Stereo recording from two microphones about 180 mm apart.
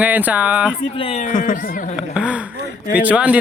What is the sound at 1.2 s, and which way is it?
Speech, 45° left (ahead or behind).